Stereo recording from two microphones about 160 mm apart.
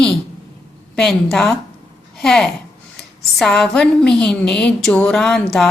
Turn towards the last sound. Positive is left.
turn(degrees=5)  # may be behind; listen again after turning